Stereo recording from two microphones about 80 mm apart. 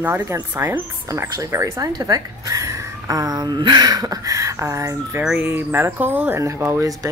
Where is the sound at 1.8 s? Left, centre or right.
Right.